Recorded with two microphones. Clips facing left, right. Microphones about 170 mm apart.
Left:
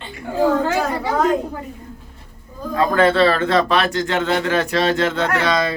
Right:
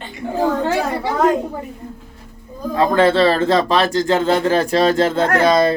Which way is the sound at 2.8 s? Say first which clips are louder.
Right 1 dB; 30° right (ahead or behind).